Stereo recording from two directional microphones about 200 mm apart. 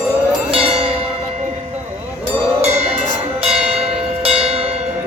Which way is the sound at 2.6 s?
30° right (ahead or behind).